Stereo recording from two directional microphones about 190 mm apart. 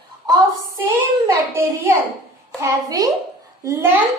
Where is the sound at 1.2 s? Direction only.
10° right (ahead or behind).